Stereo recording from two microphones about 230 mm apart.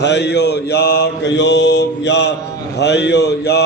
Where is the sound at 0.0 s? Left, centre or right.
Left.